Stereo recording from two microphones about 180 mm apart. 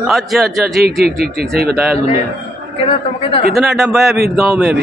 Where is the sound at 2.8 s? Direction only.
35° left (ahead or behind).